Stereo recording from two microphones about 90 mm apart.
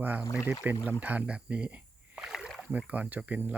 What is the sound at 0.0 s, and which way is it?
Speech, 20° right (ahead or behind).